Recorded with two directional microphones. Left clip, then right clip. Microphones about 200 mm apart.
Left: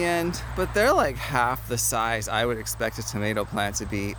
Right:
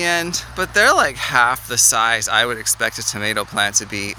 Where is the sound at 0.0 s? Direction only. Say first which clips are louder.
Right 6 dB; 5° left (ahead or behind).